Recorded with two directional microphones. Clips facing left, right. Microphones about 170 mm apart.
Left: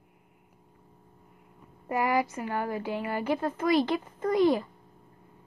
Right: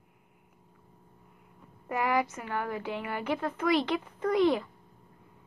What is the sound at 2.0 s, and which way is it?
A child's voice, 45° left (ahead or behind).